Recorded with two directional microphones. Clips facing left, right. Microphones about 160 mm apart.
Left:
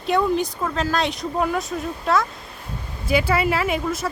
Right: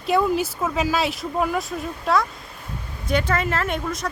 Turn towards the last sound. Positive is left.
turn(degrees=5)  # may be behind; listen again after turning